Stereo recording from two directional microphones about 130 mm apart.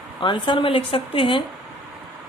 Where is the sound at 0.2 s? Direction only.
40° left (ahead or behind).